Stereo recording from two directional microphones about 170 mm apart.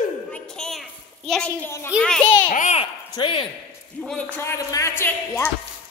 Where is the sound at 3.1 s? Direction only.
30° left (ahead or behind).